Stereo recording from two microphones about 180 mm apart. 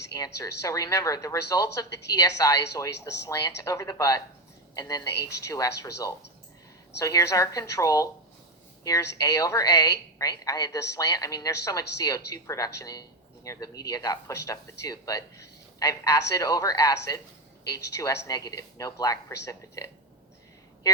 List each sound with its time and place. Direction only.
0.2 s a woman's voice: 20° left (ahead or behind)